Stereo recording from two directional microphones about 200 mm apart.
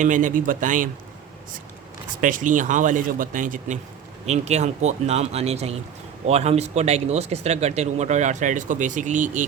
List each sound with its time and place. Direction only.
0.0 s speech: 40° right (ahead or behind)
2.2 s speech: 40° right (ahead or behind)